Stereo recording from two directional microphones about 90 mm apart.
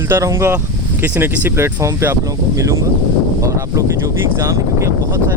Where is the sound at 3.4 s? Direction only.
35° right (ahead or behind).